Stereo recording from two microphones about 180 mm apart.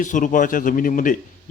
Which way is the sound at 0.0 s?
45° left (ahead or behind).